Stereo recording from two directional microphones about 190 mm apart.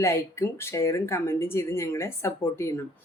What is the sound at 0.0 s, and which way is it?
Speech, 15° left (ahead or behind).